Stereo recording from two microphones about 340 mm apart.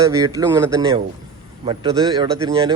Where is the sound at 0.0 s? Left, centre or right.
Centre.